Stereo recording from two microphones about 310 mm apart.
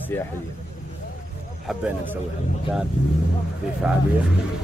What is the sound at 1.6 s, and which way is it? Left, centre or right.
Speech, centre.